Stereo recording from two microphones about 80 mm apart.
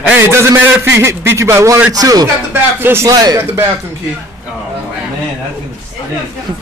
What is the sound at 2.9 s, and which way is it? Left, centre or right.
Speech, right.